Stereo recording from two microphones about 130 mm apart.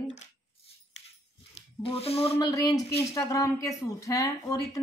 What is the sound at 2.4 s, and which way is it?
A woman's voice, 30° left (ahead or behind).